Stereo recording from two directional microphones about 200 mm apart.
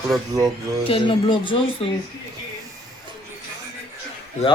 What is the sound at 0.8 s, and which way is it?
Speech, 25° left (ahead or behind).